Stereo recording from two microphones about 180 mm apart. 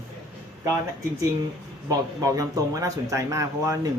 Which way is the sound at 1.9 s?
20° right (ahead or behind).